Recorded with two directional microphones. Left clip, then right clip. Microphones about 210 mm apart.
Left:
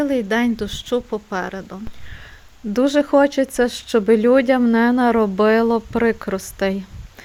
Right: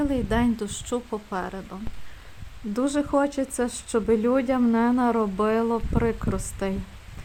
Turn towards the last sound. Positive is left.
turn(degrees=15)  # may be behind; listen again after turning